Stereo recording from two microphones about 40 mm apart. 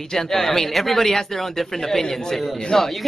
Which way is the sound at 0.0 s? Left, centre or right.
Centre.